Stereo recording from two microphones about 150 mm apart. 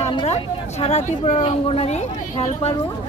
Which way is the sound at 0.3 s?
45° left (ahead or behind).